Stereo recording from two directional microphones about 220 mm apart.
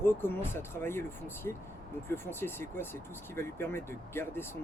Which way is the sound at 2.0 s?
10° left (ahead or behind).